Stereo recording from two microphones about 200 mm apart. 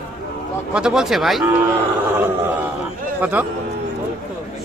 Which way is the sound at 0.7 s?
5° right (ahead or behind).